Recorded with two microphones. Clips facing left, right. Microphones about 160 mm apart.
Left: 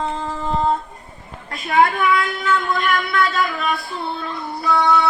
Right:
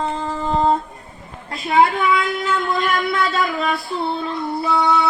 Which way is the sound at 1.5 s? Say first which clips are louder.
Right 1 dB; 25° right (ahead or behind).